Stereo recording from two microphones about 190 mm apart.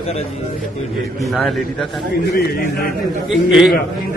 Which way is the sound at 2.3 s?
55° left (ahead or behind).